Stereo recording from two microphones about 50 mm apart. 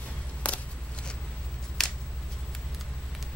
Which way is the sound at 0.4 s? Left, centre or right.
Left.